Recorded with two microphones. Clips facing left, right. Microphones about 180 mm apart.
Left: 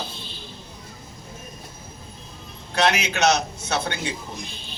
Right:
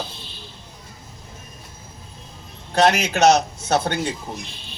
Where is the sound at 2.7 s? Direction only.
45° right (ahead or behind).